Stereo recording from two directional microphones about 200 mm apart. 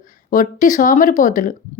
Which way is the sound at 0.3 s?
40° left (ahead or behind).